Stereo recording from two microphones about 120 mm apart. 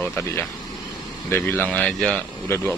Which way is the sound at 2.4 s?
20° left (ahead or behind).